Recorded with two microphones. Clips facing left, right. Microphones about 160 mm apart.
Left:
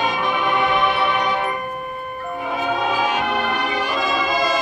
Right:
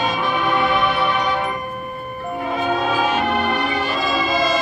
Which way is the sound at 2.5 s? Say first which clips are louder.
Right 1 dB; 15° left (ahead or behind).